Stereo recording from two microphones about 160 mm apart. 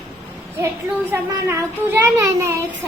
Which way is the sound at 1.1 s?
15° right (ahead or behind).